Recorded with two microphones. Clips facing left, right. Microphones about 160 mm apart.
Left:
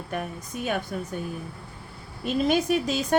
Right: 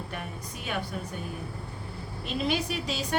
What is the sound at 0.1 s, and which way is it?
Speech, 45° left (ahead or behind).